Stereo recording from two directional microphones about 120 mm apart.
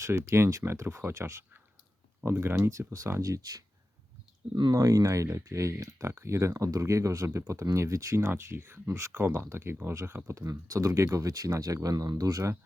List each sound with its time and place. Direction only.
0.0 s speech: 20° right (ahead or behind)